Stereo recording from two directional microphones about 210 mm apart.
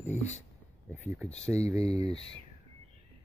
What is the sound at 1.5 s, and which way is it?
Speech, 30° left (ahead or behind).